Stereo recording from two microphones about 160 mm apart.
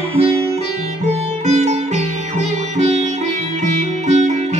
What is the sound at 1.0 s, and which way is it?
Sitar, 45° right (ahead or behind).